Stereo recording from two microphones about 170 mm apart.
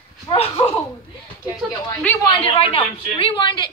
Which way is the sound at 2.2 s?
30° left (ahead or behind).